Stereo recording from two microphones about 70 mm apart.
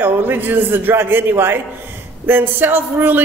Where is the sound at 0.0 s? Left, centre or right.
Right.